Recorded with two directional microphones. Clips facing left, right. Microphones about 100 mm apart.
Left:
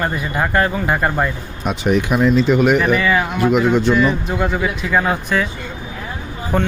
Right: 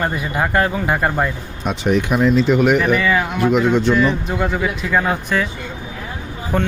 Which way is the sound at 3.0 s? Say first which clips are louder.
Left 1 dB; 20° left (ahead or behind).